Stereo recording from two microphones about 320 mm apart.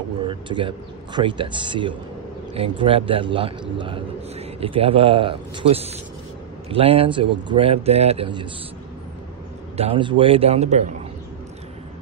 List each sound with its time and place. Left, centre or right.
0.3 s a man's voice: centre
9.8 s a man's voice: centre